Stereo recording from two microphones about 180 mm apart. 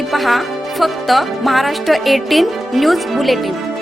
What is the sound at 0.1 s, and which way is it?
Speech, centre (ahead or behind).